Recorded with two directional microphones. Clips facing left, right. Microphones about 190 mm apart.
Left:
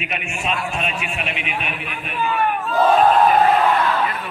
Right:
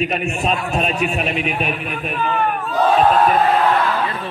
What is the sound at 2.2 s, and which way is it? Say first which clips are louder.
Speech: even; 10° left (ahead or behind).